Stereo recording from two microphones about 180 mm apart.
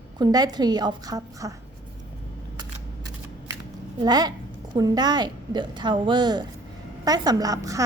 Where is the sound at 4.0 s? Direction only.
20° right (ahead or behind).